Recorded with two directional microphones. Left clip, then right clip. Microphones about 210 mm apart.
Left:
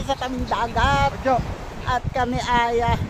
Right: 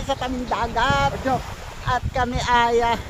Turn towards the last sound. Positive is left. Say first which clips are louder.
# right 2 dB
turn(degrees=-20)  # may be behind; listen again after turning